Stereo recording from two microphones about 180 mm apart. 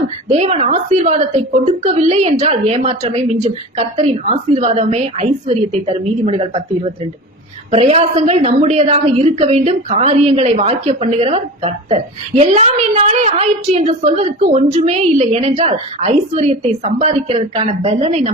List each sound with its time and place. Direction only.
0.3 s a woman's voice: 35° right (ahead or behind)